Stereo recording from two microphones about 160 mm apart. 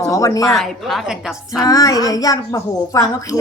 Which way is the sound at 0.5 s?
Centre (ahead or behind).